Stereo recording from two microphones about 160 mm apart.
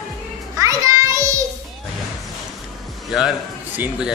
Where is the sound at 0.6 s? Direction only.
20° right (ahead or behind).